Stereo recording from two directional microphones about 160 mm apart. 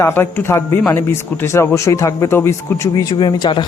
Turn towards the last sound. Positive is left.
turn(degrees=30)  # may be behind; listen again after turning